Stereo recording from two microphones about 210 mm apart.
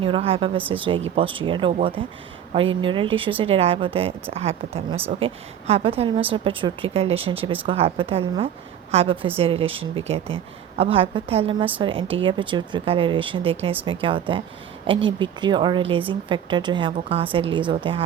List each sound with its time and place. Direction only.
0.0 s a woman's voice: 25° right (ahead or behind)